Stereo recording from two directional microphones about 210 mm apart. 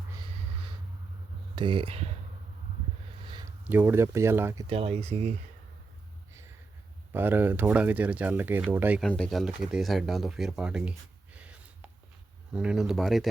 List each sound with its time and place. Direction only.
1.5 s speech: 25° right (ahead or behind)
3.2 s a sound: 20° right (ahead or behind)
3.7 s speech: 10° right (ahead or behind)
4.7 s speech: 25° right (ahead or behind)
7.1 s speech: 10° right (ahead or behind)
9.0 s speech: 5° left (ahead or behind)
11.3 s gasp: 5° right (ahead or behind)
12.5 s speech: 5° right (ahead or behind)